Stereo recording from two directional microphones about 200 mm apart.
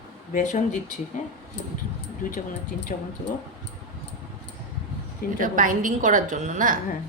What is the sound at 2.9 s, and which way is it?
Speech, 40° left (ahead or behind).